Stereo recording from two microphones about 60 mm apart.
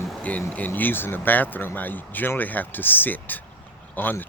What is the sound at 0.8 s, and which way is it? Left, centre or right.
Speech, left.